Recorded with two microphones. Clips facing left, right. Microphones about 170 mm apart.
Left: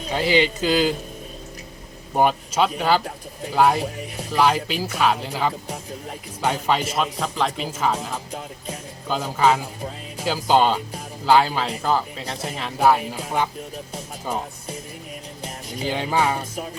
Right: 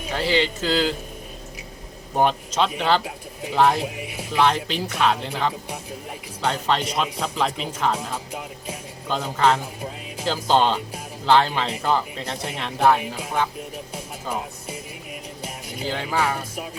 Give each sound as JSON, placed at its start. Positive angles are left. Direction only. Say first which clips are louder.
{"t": 0.1, "sound": "speech", "louder": "left 3 dB", "side_deg": 15}
{"t": 2.1, "sound": "speech", "louder": "left 1 dB", "side_deg": 10}
{"t": 3.0, "sound": "speech", "louder": "left 1 dB", "side_deg": -5}
{"t": 3.8, "sound": "speech", "louder": "left 1 dB", "side_deg": -10}
{"t": 4.4, "sound": "speech", "louder": "left 1 dB", "side_deg": 5}
{"t": 9.0, "sound": "speech", "louder": "left 1 dB", "side_deg": 5}
{"t": 15.8, "sound": "speech", "louder": "left 2 dB", "side_deg": 15}